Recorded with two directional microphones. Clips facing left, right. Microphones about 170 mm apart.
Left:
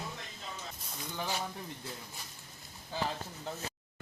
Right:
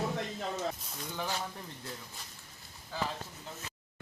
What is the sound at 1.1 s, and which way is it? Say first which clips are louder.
Speech: even; 10° left (ahead or behind).